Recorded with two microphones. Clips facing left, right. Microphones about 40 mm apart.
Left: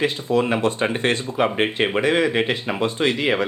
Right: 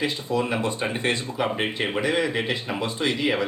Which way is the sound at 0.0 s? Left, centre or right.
Left.